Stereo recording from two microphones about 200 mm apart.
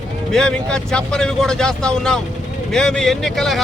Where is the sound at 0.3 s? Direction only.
5° left (ahead or behind).